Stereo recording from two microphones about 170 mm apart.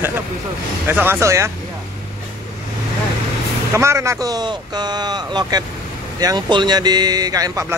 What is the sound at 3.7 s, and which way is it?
Speech, 15° right (ahead or behind).